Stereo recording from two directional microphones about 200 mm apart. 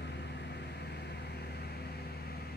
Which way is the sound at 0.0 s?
60° left (ahead or behind).